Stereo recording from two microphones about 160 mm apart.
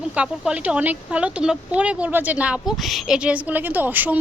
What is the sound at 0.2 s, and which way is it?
A woman's voice, 10° right (ahead or behind).